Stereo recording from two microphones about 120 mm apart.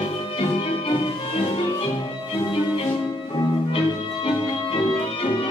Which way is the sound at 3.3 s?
45° left (ahead or behind).